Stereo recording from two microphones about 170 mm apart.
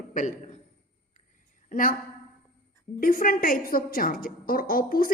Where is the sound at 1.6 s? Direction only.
55° left (ahead or behind).